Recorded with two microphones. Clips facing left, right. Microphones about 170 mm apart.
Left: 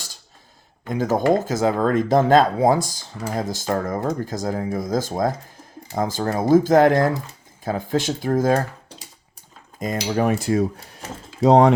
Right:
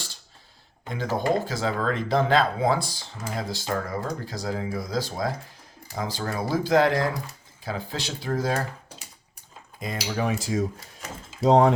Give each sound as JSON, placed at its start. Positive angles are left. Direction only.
{"t": 0.9, "sound": "speech", "side_deg": 45}
{"t": 9.8, "sound": "speech", "side_deg": 45}